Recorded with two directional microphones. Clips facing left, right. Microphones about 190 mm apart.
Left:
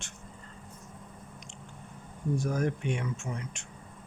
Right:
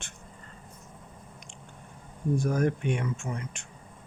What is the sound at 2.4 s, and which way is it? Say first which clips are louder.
Speech: right 4 dB; 55° right (ahead or behind).